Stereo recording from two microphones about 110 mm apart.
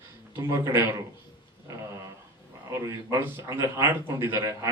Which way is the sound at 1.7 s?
30° right (ahead or behind).